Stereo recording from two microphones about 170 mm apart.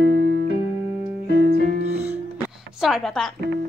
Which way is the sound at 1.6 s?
75° left (ahead or behind).